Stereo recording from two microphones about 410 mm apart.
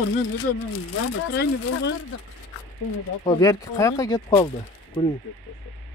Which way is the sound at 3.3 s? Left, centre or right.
Centre.